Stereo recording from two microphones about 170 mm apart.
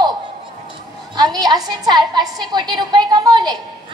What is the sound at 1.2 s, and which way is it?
A woman's voice, 25° right (ahead or behind).